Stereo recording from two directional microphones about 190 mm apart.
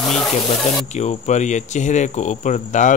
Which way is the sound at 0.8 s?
35° left (ahead or behind).